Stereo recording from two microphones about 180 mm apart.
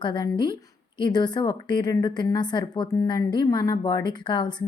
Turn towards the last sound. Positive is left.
turn(degrees=25)  # may be behind; listen again after turning